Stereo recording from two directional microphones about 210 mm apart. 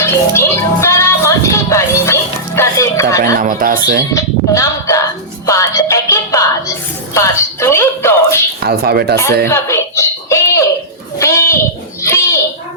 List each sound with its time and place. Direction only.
0.0 s speech: 10° left (ahead or behind)
3.3 s speech: 40° right (ahead or behind)
4.1 s speech: 15° left (ahead or behind)
8.6 s speech: 50° right (ahead or behind)
9.5 s a sound: 10° left (ahead or behind)
11.2 s a child's voice: 15° left (ahead or behind)
12.0 s a sound: 10° left (ahead or behind)